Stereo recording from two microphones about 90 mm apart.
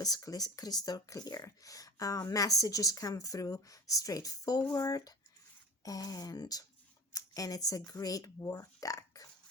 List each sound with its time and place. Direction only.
0.0 s speech: 45° left (ahead or behind)